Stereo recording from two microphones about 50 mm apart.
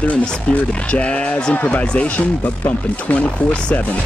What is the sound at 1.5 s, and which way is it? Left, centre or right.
Speech, left.